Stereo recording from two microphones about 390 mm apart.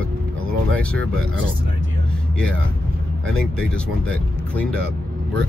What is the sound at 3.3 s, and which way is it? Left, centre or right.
Speech, centre.